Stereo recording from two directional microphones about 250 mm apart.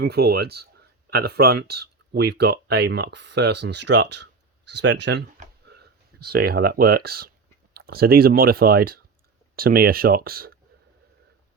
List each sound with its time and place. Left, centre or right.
0.0 s speech: right